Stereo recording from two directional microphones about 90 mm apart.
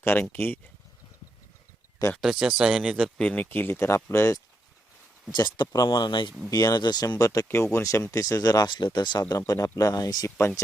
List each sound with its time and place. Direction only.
0.0 s speech: 25° left (ahead or behind)
2.2 s speech: 5° right (ahead or behind)
3.2 s speech: 10° left (ahead or behind)
3.4 s speech: 25° left (ahead or behind)
5.3 s speech: 55° left (ahead or behind)
6.5 s speech: 50° left (ahead or behind)
7.4 s speech: 30° left (ahead or behind); by 9.2 s 50° left (ahead or behind)
9.5 s speech: 40° left (ahead or behind)